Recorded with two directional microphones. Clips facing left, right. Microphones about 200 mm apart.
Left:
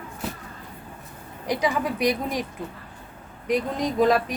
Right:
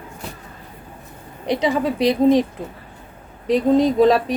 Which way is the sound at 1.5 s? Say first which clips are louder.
Right 5 dB; 25° right (ahead or behind).